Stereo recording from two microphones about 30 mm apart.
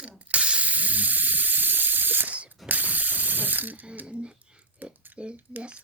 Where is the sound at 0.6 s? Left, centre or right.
Right.